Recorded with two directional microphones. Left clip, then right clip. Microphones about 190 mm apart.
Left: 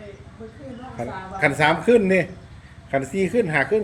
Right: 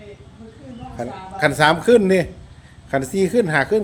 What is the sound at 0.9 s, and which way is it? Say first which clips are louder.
Speech: right 2 dB; 30° right (ahead or behind).